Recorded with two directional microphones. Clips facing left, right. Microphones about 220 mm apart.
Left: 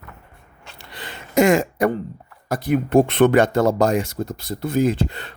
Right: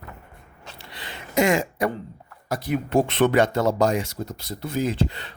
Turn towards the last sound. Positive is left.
turn(degrees=50)  # may be behind; listen again after turning